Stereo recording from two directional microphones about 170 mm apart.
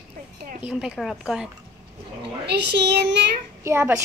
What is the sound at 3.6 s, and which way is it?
Speech, 15° right (ahead or behind).